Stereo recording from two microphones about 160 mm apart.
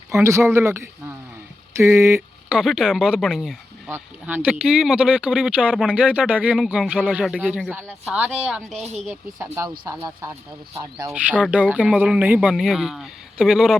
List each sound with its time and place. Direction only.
0.1 s speech: 15° right (ahead or behind)
2.6 s speech: 5° right (ahead or behind)
3.8 s speech: 15° right (ahead or behind)
9.8 s speech: 15° right (ahead or behind)
11.1 s speech: 10° right (ahead or behind)